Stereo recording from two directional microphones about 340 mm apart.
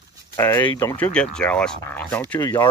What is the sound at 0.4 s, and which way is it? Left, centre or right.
Speech, centre.